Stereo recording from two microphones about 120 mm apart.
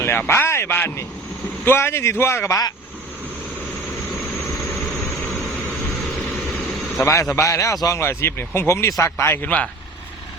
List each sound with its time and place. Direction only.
0.0 s a man's voice: 20° left (ahead or behind)
7.0 s speech: 25° left (ahead or behind)